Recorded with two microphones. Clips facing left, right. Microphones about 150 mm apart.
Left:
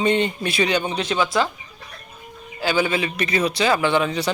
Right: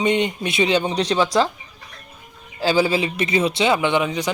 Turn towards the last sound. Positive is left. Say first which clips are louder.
# even
turn(degrees=-15)  # may be behind; listen again after turning